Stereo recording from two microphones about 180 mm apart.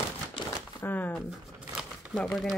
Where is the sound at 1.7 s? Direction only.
Centre (ahead or behind).